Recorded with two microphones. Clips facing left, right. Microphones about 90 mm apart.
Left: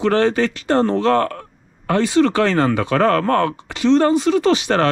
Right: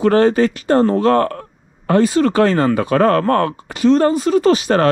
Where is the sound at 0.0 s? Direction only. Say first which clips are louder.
Right 4 dB; 40° right (ahead or behind).